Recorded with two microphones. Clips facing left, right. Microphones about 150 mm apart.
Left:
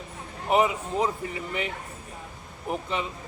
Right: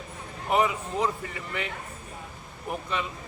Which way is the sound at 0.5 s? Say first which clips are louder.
Left 2 dB; 25° left (ahead or behind).